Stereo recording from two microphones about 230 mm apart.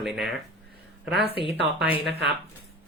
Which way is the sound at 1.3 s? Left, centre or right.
Left.